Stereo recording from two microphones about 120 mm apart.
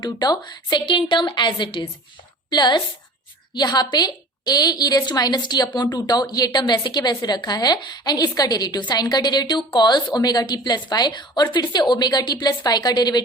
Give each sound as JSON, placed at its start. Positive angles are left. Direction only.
{"t": 0.0, "sound": "a woman's voice", "side_deg": 35}